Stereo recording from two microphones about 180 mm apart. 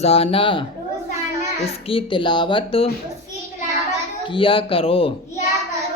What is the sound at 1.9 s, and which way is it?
Speech, 25° left (ahead or behind).